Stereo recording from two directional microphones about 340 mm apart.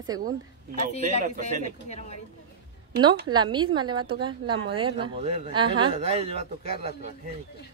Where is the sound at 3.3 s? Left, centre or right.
Centre.